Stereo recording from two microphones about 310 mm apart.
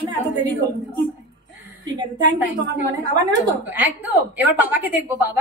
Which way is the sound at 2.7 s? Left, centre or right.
Right.